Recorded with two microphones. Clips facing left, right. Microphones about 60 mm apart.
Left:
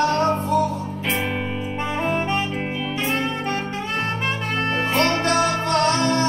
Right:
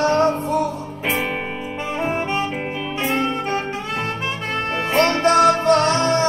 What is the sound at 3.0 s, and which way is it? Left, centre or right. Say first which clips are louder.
Music: right 3 dB; right.